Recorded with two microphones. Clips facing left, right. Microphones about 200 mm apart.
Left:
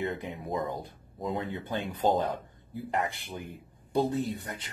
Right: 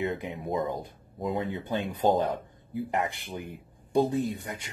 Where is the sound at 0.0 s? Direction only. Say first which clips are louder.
Right 2 dB; 20° right (ahead or behind).